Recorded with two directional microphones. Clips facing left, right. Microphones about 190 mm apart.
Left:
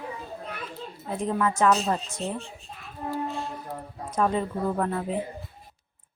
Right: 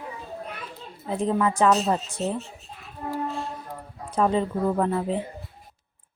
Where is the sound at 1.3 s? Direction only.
30° right (ahead or behind).